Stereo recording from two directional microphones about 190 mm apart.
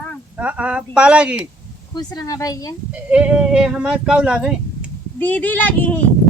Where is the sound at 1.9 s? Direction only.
20° left (ahead or behind).